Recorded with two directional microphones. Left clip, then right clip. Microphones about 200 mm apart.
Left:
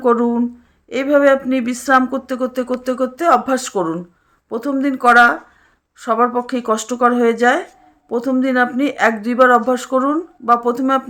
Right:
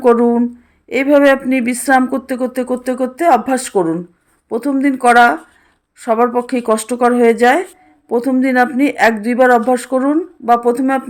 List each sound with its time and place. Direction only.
0.0 s speech: 10° right (ahead or behind)